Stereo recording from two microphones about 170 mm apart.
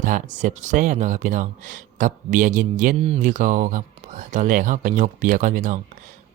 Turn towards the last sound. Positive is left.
turn(degrees=-50)  # may be behind; listen again after turning